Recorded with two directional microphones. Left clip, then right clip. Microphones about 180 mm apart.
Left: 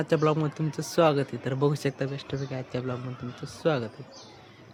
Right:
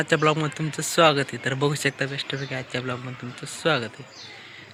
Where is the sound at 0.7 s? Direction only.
20° right (ahead or behind).